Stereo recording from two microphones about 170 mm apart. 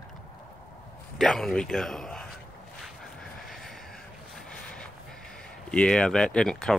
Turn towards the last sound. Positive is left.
turn(degrees=5)  # may be behind; listen again after turning